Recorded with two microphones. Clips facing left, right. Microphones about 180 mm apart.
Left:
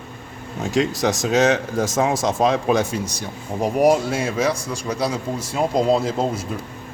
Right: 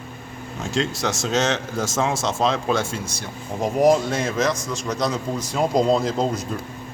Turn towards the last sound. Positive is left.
turn(degrees=5)  # may be behind; listen again after turning